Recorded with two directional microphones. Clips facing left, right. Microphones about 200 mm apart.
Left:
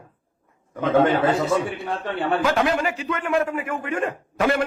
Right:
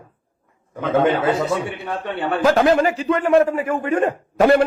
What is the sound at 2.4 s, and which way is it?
A man's voice, 40° right (ahead or behind).